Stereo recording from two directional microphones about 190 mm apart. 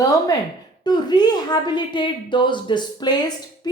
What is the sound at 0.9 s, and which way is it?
Speech, 20° left (ahead or behind).